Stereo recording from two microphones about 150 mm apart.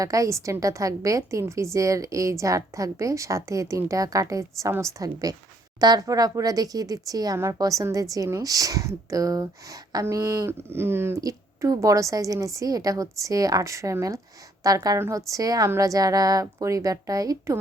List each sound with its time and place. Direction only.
0.0 s speech: 20° right (ahead or behind)